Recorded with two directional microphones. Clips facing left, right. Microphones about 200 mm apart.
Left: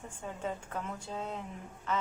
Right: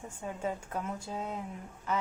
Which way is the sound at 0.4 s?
10° right (ahead or behind).